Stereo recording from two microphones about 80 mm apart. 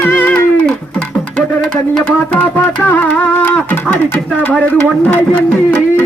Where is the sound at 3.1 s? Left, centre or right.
Centre.